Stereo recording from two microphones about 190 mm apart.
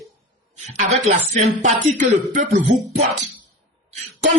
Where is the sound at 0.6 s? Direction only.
35° right (ahead or behind).